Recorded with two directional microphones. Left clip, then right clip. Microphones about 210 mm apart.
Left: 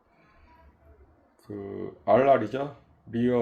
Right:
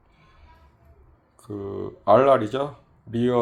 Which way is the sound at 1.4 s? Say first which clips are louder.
Right 5 dB; 5° right (ahead or behind).